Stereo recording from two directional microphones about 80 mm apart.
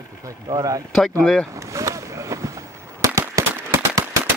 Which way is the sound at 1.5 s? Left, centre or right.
Right.